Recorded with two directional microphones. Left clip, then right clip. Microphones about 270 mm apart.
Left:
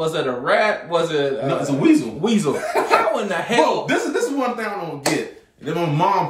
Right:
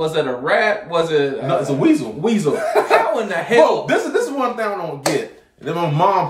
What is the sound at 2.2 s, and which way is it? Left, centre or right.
Speech, centre.